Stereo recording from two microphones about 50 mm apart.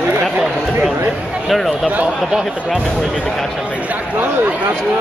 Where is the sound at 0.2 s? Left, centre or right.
Centre.